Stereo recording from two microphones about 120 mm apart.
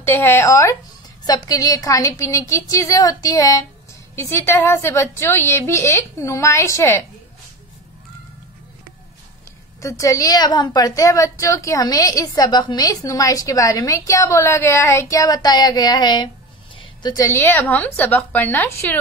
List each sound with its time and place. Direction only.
0.0 s a woman's voice: 20° left (ahead or behind)
9.8 s a woman's voice: 25° left (ahead or behind)
16.7 s a sound: 35° left (ahead or behind)
17.3 s a woman's voice: 15° left (ahead or behind)